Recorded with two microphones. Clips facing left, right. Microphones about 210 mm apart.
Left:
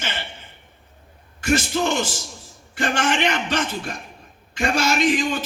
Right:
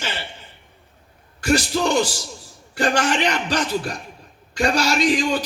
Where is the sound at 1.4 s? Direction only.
35° right (ahead or behind).